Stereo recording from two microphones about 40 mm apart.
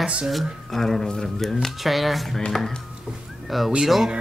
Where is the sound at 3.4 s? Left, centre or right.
Centre.